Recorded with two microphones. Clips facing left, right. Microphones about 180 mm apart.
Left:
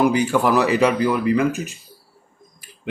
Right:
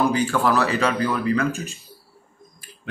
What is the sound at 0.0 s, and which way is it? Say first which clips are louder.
Speech: left 3 dB; 15° left (ahead or behind).